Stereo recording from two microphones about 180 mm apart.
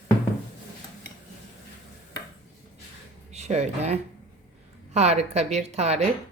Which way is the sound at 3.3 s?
40° right (ahead or behind).